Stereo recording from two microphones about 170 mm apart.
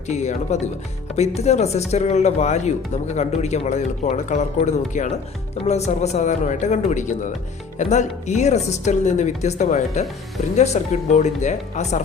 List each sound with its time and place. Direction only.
0.1 s speech: 40° left (ahead or behind)